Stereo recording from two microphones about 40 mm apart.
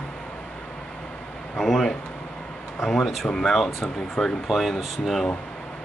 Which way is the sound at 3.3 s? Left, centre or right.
Centre.